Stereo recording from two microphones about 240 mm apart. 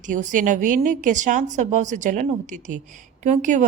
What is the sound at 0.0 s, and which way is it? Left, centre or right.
A woman's voice, right.